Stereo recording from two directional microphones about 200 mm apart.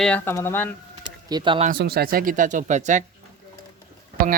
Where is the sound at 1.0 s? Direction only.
20° right (ahead or behind).